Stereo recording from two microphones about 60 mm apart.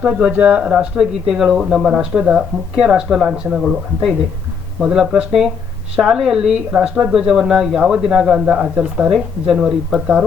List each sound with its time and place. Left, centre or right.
0.0 s speech: centre
0.7 s speech: centre
9.0 s speech: centre
9.6 s speech: centre